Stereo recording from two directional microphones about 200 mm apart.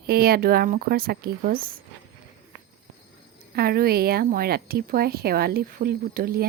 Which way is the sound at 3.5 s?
50° right (ahead or behind).